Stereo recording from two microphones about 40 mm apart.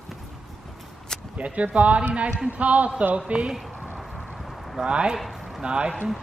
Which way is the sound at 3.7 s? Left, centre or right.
Right.